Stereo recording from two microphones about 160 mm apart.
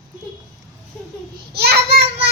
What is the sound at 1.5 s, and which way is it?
Child singing, 75° right (ahead or behind).